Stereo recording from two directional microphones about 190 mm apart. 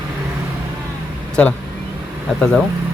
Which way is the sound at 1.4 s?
5° left (ahead or behind).